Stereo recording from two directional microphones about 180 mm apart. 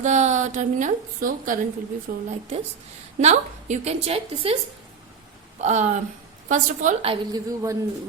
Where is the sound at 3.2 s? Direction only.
40° right (ahead or behind).